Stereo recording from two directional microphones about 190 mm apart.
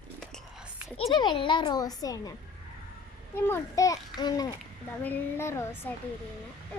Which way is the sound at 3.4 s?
15° left (ahead or behind).